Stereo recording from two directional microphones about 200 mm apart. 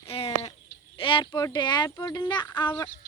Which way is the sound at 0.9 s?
25° left (ahead or behind).